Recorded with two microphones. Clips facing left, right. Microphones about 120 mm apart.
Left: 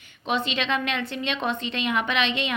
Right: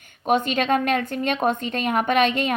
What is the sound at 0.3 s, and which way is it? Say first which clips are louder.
A woman's voice: right 6 dB; 50° right (ahead or behind).